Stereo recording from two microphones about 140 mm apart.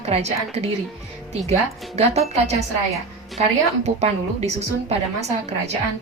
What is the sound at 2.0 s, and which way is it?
Speech, 50° right (ahead or behind).